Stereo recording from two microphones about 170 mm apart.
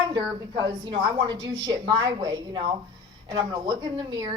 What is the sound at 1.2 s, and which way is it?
A woman's voice, 25° right (ahead or behind).